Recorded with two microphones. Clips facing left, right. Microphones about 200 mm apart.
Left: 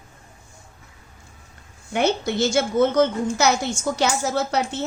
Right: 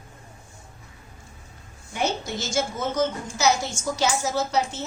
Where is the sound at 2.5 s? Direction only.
65° left (ahead or behind).